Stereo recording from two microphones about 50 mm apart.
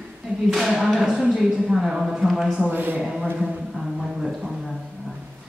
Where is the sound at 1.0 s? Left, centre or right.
Centre.